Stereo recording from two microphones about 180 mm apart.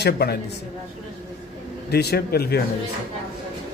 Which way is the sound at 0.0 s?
60° left (ahead or behind).